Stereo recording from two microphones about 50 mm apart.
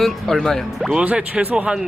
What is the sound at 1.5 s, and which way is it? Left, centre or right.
Speech, centre.